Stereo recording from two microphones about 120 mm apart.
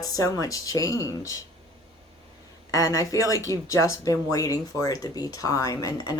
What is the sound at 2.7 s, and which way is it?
Speech, 25° left (ahead or behind).